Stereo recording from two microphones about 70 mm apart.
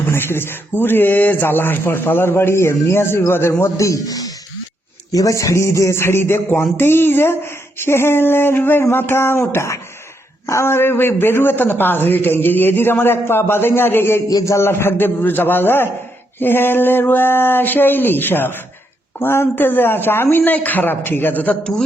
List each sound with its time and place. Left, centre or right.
0.1 s a man's voice: left
3.6 s a man's voice: left
21.6 s a man's voice: centre